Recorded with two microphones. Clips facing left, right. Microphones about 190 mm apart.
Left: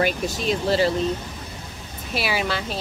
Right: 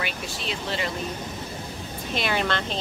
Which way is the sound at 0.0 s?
40° left (ahead or behind).